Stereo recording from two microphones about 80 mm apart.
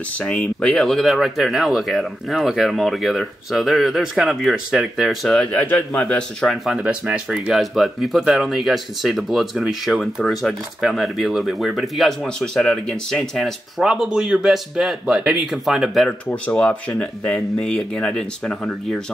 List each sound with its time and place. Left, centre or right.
0.2 s speech: centre
6.4 s speech: centre
6.8 s speech: centre
16.1 s speech: centre